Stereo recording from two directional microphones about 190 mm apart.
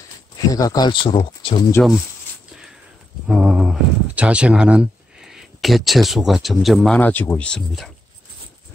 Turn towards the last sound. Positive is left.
turn(degrees=5)  # may be behind; listen again after turning